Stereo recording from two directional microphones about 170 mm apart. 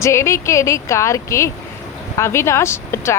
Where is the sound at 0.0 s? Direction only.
15° left (ahead or behind).